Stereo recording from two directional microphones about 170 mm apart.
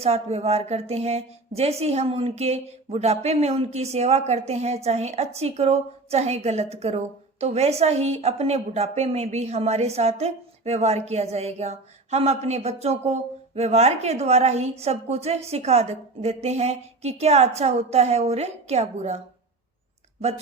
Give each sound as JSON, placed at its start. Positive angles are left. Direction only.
{"t": 0.0, "sound": "a woman's voice", "side_deg": -40}